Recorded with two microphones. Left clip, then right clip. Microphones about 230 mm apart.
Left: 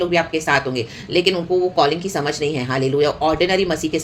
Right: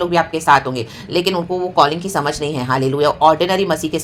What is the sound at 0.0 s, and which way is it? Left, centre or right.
Speech, centre.